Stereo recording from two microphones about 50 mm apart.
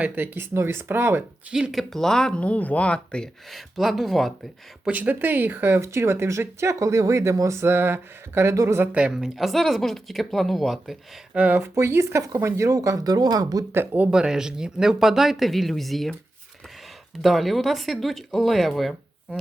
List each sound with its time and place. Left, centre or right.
0.2 s speech: right
0.5 s speech: right
1.7 s speech: centre
2.4 s speech: left
3.5 s speech: centre
4.9 s speech: right
7.7 s speech: right
8.4 s speech: right
8.9 s speech: right
9.1 s speech: centre
11.3 s speech: right
11.7 s speech: right
14.1 s speech: centre
17.2 s speech: centre